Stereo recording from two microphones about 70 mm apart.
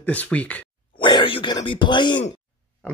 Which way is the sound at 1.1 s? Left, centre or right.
Left.